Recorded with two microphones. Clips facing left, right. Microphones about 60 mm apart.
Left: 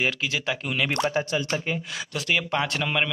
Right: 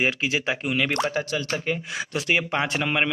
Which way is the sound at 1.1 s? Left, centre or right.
Left.